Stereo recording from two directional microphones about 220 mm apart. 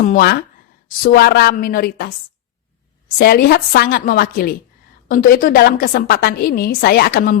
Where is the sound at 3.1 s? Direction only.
45° left (ahead or behind).